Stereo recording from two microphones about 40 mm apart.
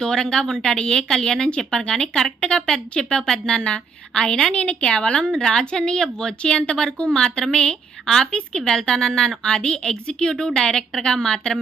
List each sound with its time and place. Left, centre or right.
0.0 s a woman's voice: centre
4.5 s a woman's voice: left